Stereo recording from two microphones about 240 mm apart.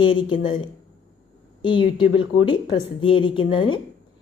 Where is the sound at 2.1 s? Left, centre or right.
Left.